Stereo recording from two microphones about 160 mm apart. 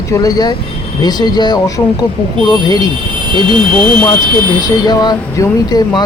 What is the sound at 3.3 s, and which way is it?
Speech, 30° right (ahead or behind).